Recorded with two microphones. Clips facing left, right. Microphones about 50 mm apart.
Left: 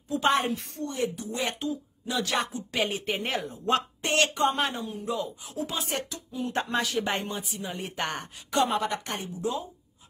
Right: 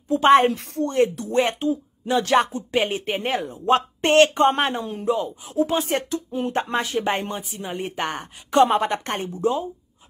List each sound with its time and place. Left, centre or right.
0.1 s a woman's voice: right
0.5 s speech: right
1.4 s a woman's voice: right; by 8.3 s centre
8.5 s a woman's voice: right